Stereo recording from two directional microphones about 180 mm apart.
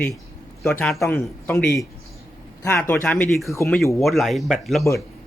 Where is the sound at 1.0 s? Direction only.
15° left (ahead or behind).